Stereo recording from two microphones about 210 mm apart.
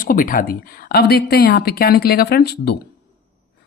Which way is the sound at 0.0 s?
40° left (ahead or behind).